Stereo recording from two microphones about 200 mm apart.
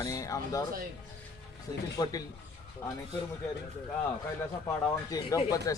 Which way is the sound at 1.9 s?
20° left (ahead or behind).